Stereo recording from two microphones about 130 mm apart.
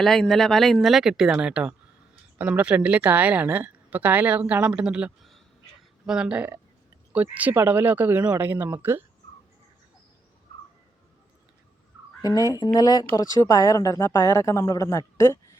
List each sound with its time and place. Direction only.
0.0 s a woman's voice: 5° left (ahead or behind); by 9.0 s 15° right (ahead or behind)
12.2 s speech: 30° left (ahead or behind)